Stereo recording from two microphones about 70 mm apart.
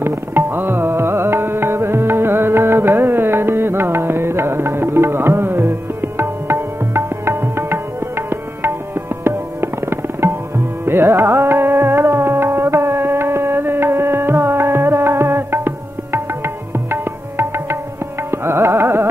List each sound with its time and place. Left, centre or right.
0.0 s music: right
8.3 s tabla: right
10.9 s music: right